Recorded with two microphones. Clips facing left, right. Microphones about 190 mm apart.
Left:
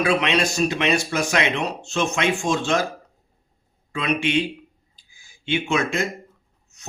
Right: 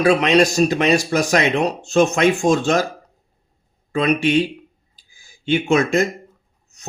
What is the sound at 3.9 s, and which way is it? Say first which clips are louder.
Speech: right 6 dB; 40° right (ahead or behind).